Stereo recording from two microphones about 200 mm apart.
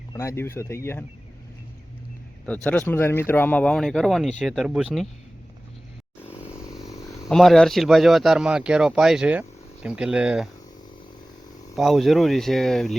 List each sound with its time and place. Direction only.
0.1 s speech: 15° left (ahead or behind)
2.6 s speech: 10° left (ahead or behind)
6.2 s vehicle: 15° left (ahead or behind)
7.3 s speech: centre (ahead or behind)
11.8 s speech: centre (ahead or behind)